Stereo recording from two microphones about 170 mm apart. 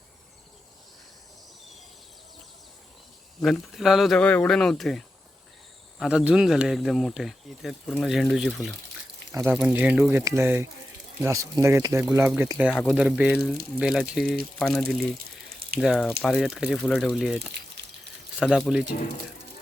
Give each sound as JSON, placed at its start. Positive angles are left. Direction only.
{"t": 3.4, "sound": "speech", "side_deg": 0}
{"t": 15.4, "sound": "a sound", "side_deg": -60}
{"t": 15.8, "sound": "speech", "side_deg": 0}